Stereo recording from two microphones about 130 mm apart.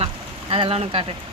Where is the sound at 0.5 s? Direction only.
50° right (ahead or behind).